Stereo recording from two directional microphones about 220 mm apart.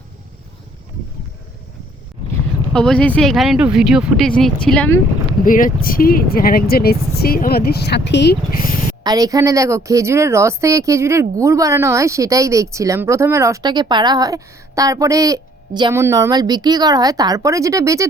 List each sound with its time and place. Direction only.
2.7 s speech: 5° left (ahead or behind)
5.5 s speech: 40° left (ahead or behind)
9.0 s speech: 15° right (ahead or behind)